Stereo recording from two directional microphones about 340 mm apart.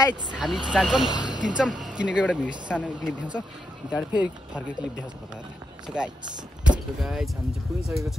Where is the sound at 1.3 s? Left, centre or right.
Centre.